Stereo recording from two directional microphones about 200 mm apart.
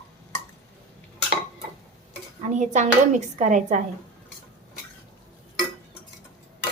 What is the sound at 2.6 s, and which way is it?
A woman's voice, 35° right (ahead or behind).